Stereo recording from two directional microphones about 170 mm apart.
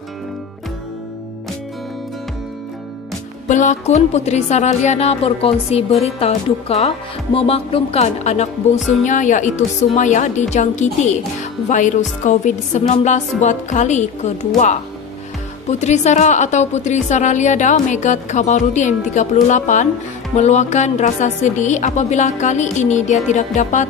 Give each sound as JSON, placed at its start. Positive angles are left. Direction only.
{"t": 3.4, "sound": "music", "side_deg": 45}
{"t": 9.9, "sound": "a woman's voice", "side_deg": 45}
{"t": 15.8, "sound": "a woman's voice", "side_deg": 40}